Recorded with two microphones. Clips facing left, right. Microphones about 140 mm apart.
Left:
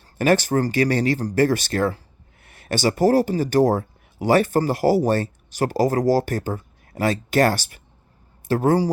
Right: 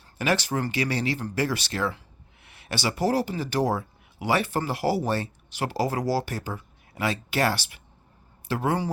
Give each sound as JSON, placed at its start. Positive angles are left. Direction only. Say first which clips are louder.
{"t": 0.2, "sound": "speech", "louder": "left 7 dB", "side_deg": 45}